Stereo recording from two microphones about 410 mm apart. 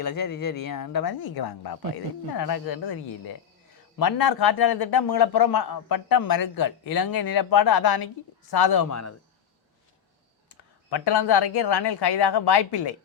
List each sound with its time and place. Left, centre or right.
0.0 s a man's voice: left
8.9 s a man's voice: left
10.8 s speech: left